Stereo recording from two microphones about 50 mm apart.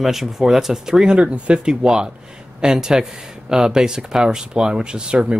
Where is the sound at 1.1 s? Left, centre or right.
Right.